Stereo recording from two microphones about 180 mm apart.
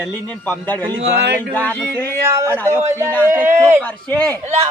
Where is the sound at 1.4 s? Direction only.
10° left (ahead or behind).